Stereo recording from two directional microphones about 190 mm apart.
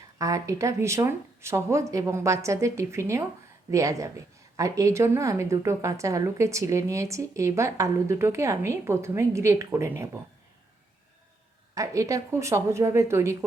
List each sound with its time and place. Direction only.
0.2 s a woman's voice: 15° right (ahead or behind)
11.7 s a woman's voice: 15° right (ahead or behind)